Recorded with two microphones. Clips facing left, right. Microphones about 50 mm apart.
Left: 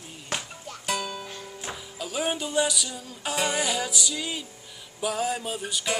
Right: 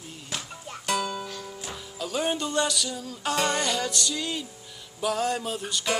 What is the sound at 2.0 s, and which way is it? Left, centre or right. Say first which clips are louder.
Music: right 2 dB; centre.